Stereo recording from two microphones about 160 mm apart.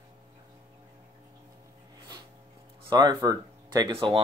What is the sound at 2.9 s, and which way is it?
Speech, 25° right (ahead or behind).